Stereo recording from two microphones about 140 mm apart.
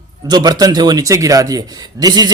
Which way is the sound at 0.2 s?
30° right (ahead or behind).